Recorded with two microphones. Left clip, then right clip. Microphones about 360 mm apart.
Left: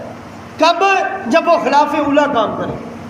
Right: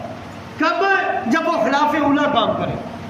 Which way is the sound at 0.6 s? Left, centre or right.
Centre.